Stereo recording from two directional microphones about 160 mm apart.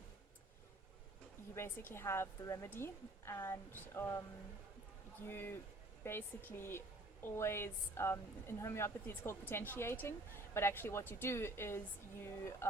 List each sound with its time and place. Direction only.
1.5 s a woman's voice: 15° left (ahead or behind)
5.2 s a woman's voice: 15° left (ahead or behind)